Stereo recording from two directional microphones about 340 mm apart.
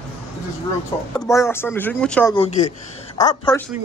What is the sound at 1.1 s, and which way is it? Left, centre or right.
Speech, centre.